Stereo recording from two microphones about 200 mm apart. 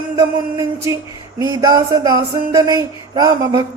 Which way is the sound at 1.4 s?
20° right (ahead or behind).